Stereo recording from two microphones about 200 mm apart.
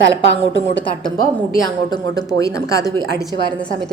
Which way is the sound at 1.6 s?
20° left (ahead or behind).